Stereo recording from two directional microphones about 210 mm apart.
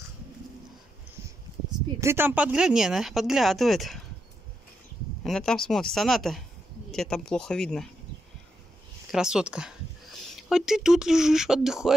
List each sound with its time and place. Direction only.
2.0 s speech: 10° right (ahead or behind)
5.2 s speech: centre (ahead or behind)
9.1 s speech: 5° right (ahead or behind)